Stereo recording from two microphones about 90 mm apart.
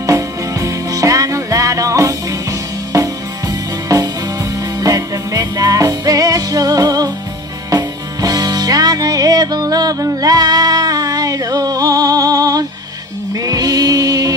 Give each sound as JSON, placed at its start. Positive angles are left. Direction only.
{"t": 0.0, "sound": "music", "side_deg": -35}